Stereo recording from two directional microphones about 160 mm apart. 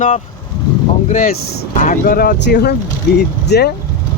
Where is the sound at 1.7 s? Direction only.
50° left (ahead or behind); by 3.7 s 90° left.